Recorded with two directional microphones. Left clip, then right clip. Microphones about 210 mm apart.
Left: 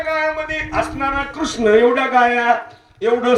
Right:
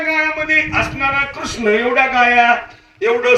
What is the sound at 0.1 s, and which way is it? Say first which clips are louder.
A man's voice: right 5 dB; 60° left (ahead or behind).